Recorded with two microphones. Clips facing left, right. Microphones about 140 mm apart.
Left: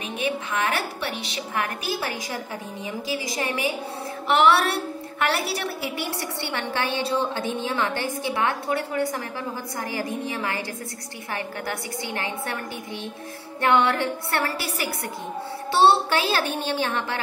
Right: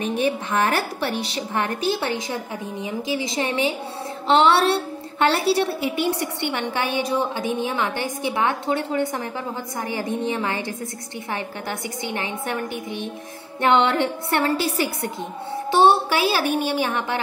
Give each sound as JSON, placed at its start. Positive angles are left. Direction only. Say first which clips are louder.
{"t": 0.2, "sound": "a woman's voice", "louder": "right 3 dB", "side_deg": -35}
{"t": 12.1, "sound": "a woman's voice", "louder": "right 3 dB", "side_deg": -20}